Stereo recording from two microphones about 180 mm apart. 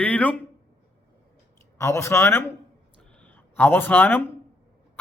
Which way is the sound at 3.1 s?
10° left (ahead or behind).